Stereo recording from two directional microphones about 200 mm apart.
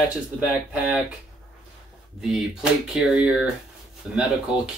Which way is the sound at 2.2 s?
Centre (ahead or behind).